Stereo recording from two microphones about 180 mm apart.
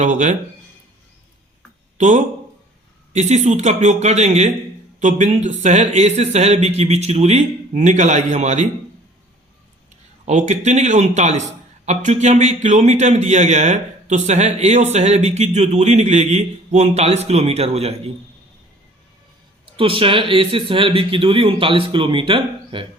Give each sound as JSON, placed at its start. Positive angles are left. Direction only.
{"t": 0.0, "sound": "speech", "side_deg": -45}
{"t": 2.0, "sound": "a man's voice", "side_deg": -40}
{"t": 10.2, "sound": "a man's voice", "side_deg": -40}
{"t": 19.6, "sound": "speech", "side_deg": -30}